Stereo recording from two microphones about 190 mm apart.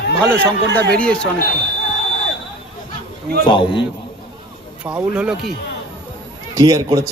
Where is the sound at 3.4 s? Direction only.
25° left (ahead or behind).